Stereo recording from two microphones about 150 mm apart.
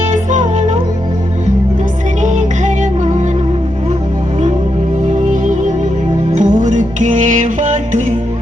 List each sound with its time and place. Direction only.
0.1 s music: 55° right (ahead or behind)
2.2 s music: 55° right (ahead or behind)
6.3 s music: 55° right (ahead or behind)